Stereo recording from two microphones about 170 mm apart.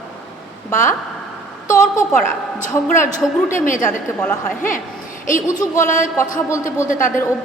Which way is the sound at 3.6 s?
50° left (ahead or behind).